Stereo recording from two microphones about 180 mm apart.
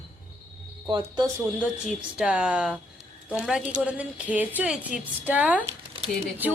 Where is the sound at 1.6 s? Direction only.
5° right (ahead or behind).